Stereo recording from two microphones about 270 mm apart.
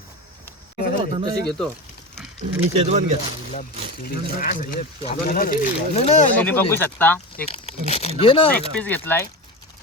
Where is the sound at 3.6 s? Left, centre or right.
Left.